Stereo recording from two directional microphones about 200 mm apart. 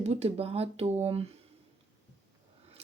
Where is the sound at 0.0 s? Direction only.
30° right (ahead or behind).